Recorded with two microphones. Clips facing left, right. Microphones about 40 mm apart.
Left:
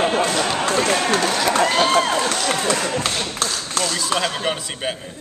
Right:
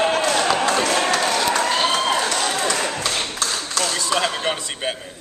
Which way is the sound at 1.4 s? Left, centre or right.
Left.